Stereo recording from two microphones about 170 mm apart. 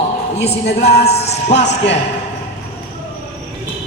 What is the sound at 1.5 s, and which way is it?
Speech, 90° left.